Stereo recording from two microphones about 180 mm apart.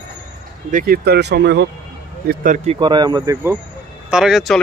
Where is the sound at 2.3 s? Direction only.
45° right (ahead or behind).